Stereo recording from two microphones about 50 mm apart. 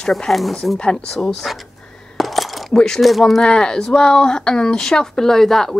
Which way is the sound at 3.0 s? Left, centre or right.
Centre.